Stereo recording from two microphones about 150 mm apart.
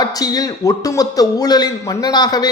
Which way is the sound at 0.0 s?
25° left (ahead or behind).